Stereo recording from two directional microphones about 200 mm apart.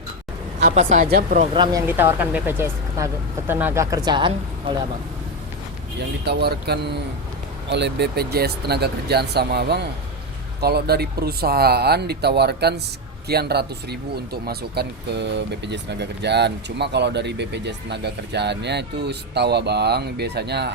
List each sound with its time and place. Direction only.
0.7 s speech: 35° right (ahead or behind)
1.5 s speech: 20° right (ahead or behind)
1.9 s speech: 10° right (ahead or behind)
6.0 s speech: 55° right (ahead or behind)